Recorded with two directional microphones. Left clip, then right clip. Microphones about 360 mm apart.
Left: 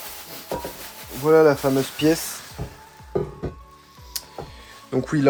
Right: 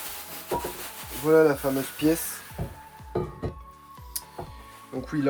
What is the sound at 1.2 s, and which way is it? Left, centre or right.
Speech, left.